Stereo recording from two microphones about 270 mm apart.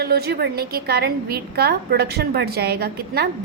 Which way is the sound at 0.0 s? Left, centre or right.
Right.